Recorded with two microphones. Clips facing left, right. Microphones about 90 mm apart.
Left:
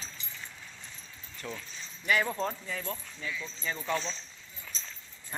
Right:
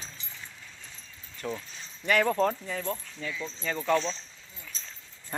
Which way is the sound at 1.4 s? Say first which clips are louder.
Right 6 dB; 35° right (ahead or behind).